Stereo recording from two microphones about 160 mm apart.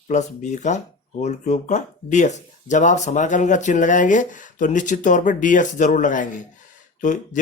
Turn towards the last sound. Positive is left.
turn(degrees=50)  # may be behind; listen again after turning